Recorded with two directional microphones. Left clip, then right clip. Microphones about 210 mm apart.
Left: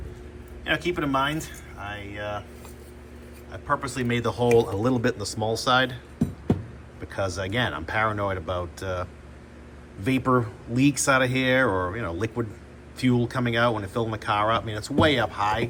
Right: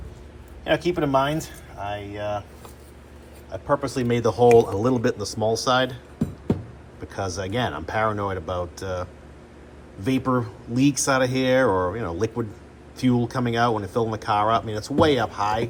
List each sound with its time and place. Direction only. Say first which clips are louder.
0.6 s speech: right 3 dB; 30° right (ahead or behind)
3.5 s speech: right 3 dB; 30° right (ahead or behind)
4.8 s speech: right 2 dB; 15° right (ahead or behind)
6.5 s cat: right 1 dB; centre (ahead or behind)
7.1 s speech: even; 15° right (ahead or behind)
10.1 s speech: left 1 dB; 10° right (ahead or behind)